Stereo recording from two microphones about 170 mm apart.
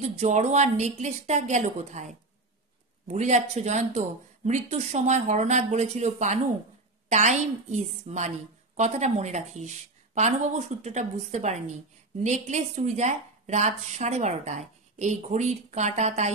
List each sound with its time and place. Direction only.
0.0 s a woman's voice: 40° right (ahead or behind)